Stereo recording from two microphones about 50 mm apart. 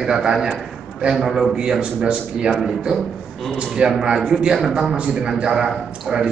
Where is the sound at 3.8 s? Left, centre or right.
Centre.